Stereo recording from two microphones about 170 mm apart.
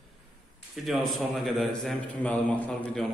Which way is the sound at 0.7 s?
Centre (ahead or behind).